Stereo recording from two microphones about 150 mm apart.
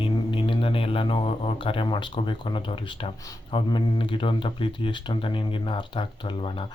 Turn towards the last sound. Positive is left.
turn(degrees=35)  # may be behind; listen again after turning